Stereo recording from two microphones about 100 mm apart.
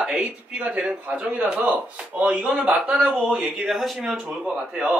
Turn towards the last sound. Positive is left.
turn(degrees=-10)  # may be behind; listen again after turning